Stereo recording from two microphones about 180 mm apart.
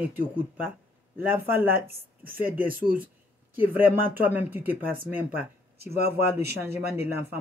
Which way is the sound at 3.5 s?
10° right (ahead or behind).